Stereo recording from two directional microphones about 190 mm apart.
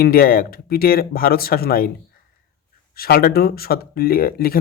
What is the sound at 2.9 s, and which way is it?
Speech, 55° left (ahead or behind).